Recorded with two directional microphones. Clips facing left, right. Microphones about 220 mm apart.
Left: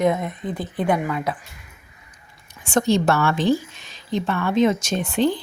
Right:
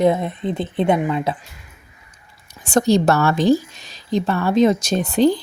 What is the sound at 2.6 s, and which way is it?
A woman's voice, 35° right (ahead or behind).